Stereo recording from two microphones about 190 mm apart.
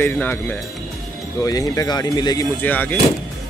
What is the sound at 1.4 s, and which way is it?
Speech, 20° left (ahead or behind).